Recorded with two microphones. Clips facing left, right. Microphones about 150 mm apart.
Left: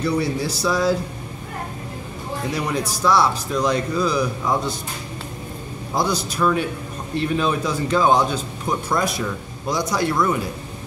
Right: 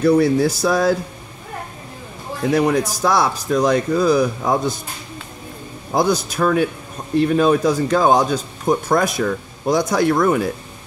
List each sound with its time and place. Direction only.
0.0 s speech: 50° right (ahead or behind)
2.5 s speech: 45° right (ahead or behind)
5.9 s speech: 50° right (ahead or behind)